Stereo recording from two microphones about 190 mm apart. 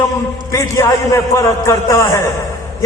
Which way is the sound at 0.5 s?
15° left (ahead or behind).